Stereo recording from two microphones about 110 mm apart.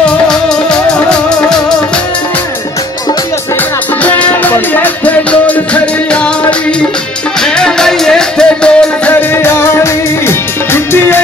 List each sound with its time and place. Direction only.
0.3 s music: 5° left (ahead or behind)
4.0 s music: 15° left (ahead or behind)
7.4 s music: 5° left (ahead or behind)
9.1 s music: 20° left (ahead or behind)